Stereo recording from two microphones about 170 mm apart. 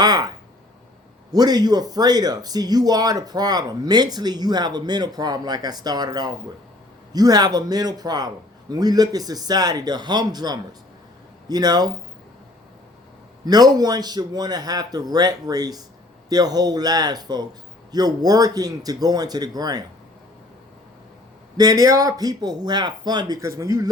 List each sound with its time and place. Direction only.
0.0 s a sound: 25° right (ahead or behind)
1.3 s speech: 25° right (ahead or behind)
13.4 s speech: 25° right (ahead or behind)
21.6 s speech: 20° right (ahead or behind)